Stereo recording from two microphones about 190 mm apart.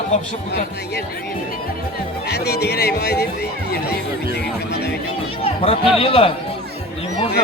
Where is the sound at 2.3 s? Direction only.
60° left (ahead or behind).